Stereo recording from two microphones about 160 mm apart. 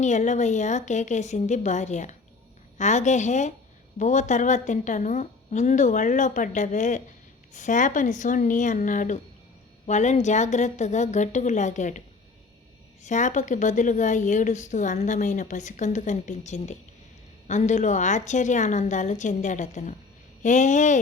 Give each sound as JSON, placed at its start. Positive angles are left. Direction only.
{"t": 0.0, "sound": "a woman's voice", "side_deg": 50}